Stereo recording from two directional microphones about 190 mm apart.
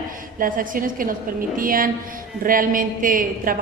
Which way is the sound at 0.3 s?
45° right (ahead or behind).